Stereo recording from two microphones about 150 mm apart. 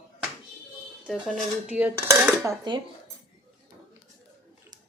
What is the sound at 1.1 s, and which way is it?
Dishes, centre (ahead or behind).